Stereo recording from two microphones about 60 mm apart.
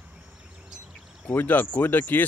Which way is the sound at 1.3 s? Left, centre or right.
Left.